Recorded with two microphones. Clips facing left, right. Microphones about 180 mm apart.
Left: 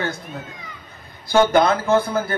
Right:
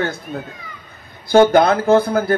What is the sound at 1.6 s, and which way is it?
Speech, 55° right (ahead or behind).